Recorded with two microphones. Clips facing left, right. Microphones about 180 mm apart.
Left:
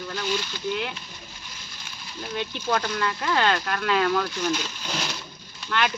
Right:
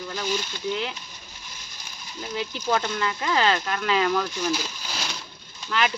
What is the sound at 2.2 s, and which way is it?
Speech, 5° right (ahead or behind).